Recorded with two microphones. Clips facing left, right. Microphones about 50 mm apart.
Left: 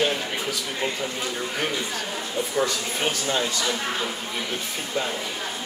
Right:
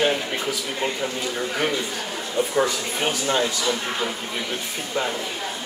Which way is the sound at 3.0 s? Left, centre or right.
Centre.